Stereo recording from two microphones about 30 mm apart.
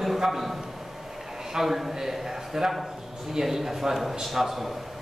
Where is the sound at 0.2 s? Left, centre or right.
Centre.